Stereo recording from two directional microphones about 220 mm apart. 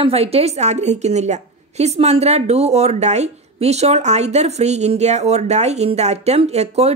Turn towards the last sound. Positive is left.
turn(degrees=-30)  # may be behind; listen again after turning